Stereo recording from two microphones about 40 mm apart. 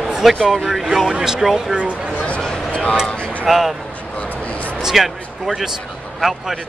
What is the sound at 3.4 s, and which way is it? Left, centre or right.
Speech, centre.